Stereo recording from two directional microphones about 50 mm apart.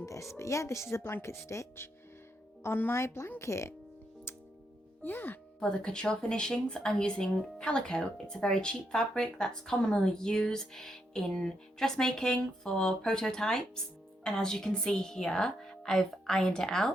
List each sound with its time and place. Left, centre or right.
0.0 s speech: left
2.6 s speech: left
2.9 s speech: left
5.0 s speech: left
5.6 s speech: centre